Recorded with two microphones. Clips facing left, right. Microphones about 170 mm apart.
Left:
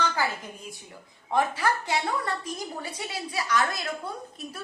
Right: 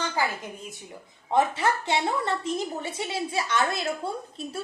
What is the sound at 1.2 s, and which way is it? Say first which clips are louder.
A woman's voice: right 2 dB; 25° right (ahead or behind).